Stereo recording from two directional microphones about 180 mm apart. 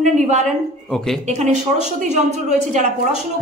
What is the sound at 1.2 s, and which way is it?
Speech, 40° right (ahead or behind).